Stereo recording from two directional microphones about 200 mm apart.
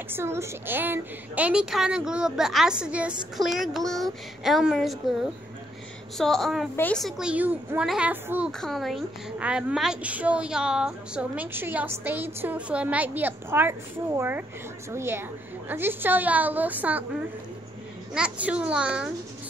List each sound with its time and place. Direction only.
0.1 s a woman's voice: 15° right (ahead or behind)
8.5 s a woman's voice: centre (ahead or behind)
18.1 s a woman's voice: 5° right (ahead or behind)